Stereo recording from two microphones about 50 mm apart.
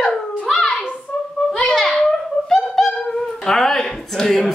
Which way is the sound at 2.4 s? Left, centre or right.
Left.